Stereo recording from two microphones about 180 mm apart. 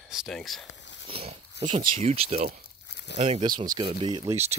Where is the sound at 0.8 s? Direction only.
80° left.